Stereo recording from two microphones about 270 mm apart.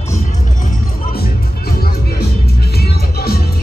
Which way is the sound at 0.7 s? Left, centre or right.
Left.